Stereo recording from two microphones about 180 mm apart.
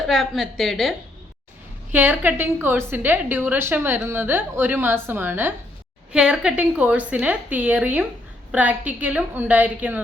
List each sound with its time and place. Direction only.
0.1 s a woman's voice: centre (ahead or behind)
1.9 s a woman's voice: 10° right (ahead or behind)